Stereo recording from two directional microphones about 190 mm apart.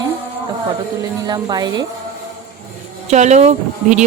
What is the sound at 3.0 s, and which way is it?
Speech, 40° right (ahead or behind).